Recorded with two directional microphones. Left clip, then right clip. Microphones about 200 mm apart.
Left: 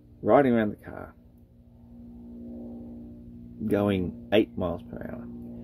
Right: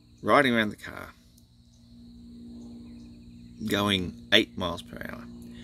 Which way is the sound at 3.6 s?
15° right (ahead or behind).